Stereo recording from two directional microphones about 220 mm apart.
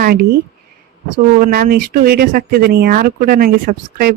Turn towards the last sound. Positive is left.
turn(degrees=-40)  # may be behind; listen again after turning